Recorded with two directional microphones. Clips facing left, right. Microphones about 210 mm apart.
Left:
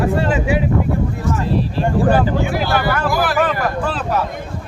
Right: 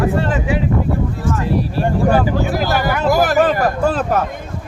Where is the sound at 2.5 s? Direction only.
40° right (ahead or behind).